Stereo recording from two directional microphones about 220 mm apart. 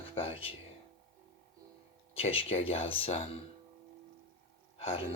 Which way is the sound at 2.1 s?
25° left (ahead or behind).